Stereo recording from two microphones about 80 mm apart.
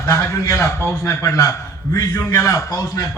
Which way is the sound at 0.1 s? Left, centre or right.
Left.